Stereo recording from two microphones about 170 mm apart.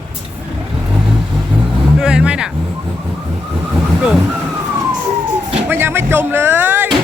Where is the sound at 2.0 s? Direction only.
5° right (ahead or behind).